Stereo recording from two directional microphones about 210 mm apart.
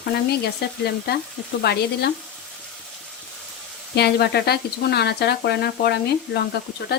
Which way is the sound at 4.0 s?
50° left (ahead or behind).